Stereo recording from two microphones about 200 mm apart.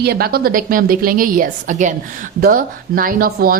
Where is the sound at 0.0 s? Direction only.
50° right (ahead or behind).